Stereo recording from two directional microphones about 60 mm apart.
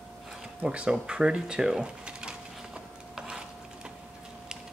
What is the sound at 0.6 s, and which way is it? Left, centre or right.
Speech, centre.